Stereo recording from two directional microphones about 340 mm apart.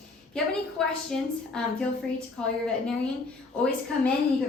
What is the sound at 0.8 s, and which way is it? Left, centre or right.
A woman's voice, centre.